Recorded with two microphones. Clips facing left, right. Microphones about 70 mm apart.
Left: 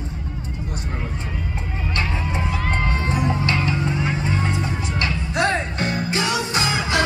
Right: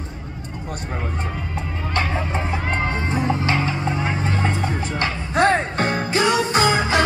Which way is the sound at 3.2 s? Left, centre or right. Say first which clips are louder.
Right 2 dB; right.